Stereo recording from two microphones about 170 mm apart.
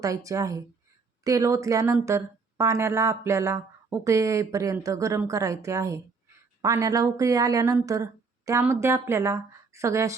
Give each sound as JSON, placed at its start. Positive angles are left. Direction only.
{"t": 0.0, "sound": "speech", "side_deg": -20}
{"t": 7.9, "sound": "a sound", "side_deg": -20}
{"t": 8.6, "sound": "speech", "side_deg": -15}